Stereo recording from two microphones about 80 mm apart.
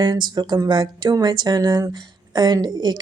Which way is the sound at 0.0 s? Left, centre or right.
Right.